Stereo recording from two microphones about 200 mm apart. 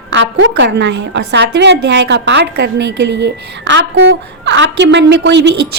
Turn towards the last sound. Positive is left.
turn(degrees=-60)  # may be behind; listen again after turning